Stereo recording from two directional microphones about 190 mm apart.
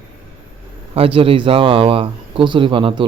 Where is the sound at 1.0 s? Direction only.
30° right (ahead or behind).